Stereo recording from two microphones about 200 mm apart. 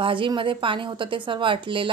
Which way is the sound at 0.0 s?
25° right (ahead or behind).